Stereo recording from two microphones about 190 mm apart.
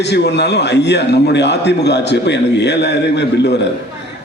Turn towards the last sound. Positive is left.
turn(degrees=65)  # may be behind; listen again after turning